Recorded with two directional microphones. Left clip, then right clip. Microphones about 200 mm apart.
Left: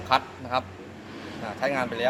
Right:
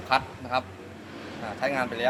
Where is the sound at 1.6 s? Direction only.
10° left (ahead or behind).